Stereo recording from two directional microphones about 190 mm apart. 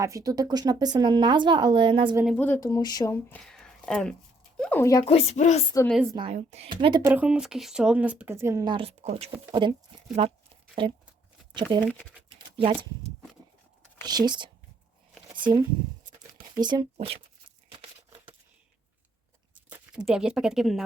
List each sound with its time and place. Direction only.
0.0 s speech: 15° right (ahead or behind)
2.2 s speech: 5° left (ahead or behind)
3.2 s speech: 5° left (ahead or behind)
5.0 s a woman's voice: 30° left (ahead or behind)
6.1 s speech: 30° right (ahead or behind)
7.1 s speech: 5° right (ahead or behind); by 11.9 s 25° right (ahead or behind)
12.4 s a sound: 25° right (ahead or behind)
14.0 s speech: 20° right (ahead or behind)
20.1 s speech: 5° right (ahead or behind)